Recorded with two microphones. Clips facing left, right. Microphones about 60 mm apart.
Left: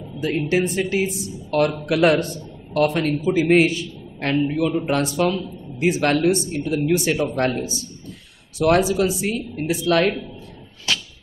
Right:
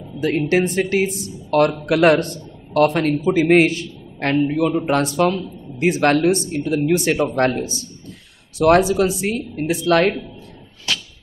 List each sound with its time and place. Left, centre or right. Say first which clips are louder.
0.2 s a man's voice: right 3 dB; right